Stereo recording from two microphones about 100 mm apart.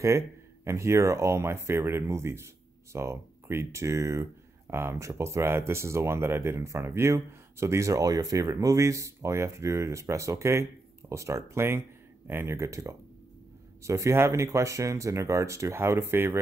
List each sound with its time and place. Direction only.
0.7 s speech: 30° right (ahead or behind)